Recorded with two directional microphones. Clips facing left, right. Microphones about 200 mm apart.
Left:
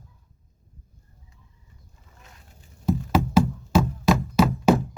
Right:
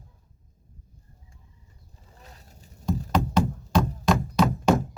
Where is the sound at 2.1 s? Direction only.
35° right (ahead or behind).